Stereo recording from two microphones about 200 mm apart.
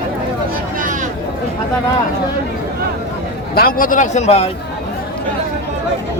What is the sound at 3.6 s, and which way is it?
Speech, 45° left (ahead or behind).